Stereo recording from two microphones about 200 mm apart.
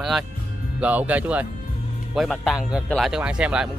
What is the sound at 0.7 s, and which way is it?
A man's voice, 5° right (ahead or behind).